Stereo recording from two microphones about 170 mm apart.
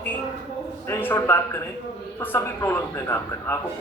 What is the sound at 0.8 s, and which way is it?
A man's voice, 15° left (ahead or behind).